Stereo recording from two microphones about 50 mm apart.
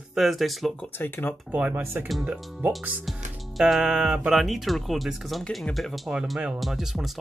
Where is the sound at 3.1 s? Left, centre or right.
Centre.